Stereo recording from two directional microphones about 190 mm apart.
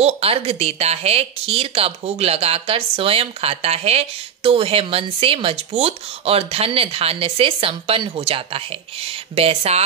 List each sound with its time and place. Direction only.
0.0 s a woman's voice: 30° right (ahead or behind)